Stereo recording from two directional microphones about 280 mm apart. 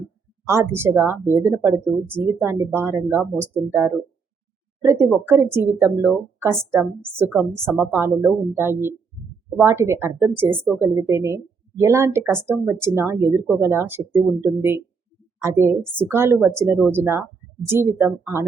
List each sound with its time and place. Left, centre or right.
0.4 s a woman's voice: centre